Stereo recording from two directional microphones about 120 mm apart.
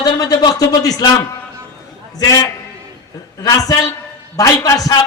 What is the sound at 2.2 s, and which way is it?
A man's voice, 30° left (ahead or behind).